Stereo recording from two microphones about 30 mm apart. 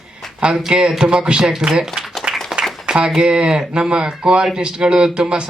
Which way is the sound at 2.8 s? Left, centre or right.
Right.